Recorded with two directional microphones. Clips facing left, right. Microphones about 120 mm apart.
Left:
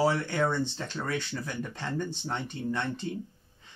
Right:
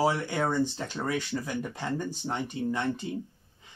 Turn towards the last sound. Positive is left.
turn(degrees=-10)  # may be behind; listen again after turning